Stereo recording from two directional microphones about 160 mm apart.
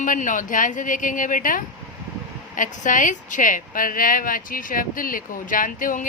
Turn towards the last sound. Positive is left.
turn(degrees=55)  # may be behind; listen again after turning